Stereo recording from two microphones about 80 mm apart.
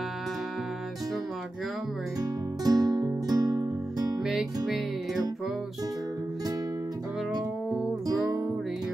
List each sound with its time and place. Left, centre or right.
2.6 s guitar: right
4.3 s music: centre